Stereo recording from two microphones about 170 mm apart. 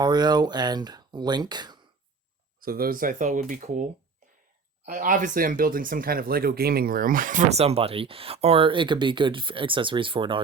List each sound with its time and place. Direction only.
0.0 s speech: 25° right (ahead or behind)
2.6 s speech: 60° right (ahead or behind)
4.9 s speech: 55° right (ahead or behind); by 10.4 s 30° right (ahead or behind)